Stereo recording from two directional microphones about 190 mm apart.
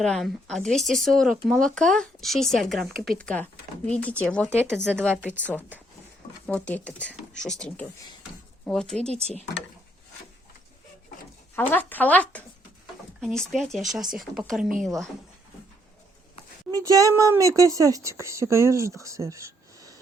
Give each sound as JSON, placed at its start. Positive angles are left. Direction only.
{"t": 0.0, "sound": "speech", "side_deg": 5}
{"t": 9.0, "sound": "speech", "side_deg": -35}
{"t": 11.5, "sound": "speech", "side_deg": 10}
{"t": 16.7, "sound": "speech", "side_deg": -15}